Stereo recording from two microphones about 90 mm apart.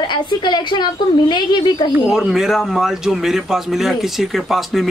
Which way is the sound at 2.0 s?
5° right (ahead or behind).